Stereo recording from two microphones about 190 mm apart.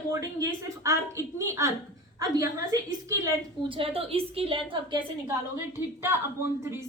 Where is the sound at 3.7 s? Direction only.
30° right (ahead or behind).